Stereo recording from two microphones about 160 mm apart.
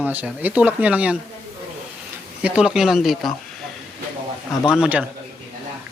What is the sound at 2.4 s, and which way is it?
Speech, 5° right (ahead or behind).